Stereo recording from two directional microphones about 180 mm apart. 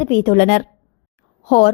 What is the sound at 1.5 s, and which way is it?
Speech, 35° left (ahead or behind).